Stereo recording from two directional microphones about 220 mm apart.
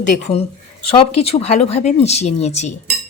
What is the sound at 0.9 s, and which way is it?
Speech, 25° left (ahead or behind).